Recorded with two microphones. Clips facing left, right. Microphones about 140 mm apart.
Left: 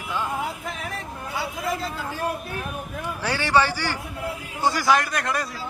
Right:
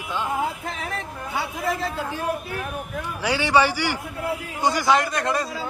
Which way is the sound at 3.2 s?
15° right (ahead or behind).